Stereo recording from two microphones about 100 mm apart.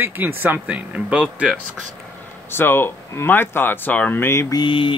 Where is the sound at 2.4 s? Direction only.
20° left (ahead or behind).